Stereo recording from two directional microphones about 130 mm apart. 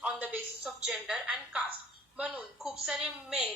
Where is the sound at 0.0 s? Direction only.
10° right (ahead or behind).